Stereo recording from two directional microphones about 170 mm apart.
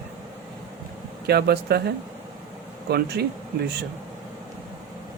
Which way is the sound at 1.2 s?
70° right (ahead or behind).